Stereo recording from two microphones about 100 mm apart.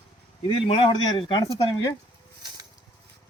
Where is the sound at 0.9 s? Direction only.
50° left (ahead or behind).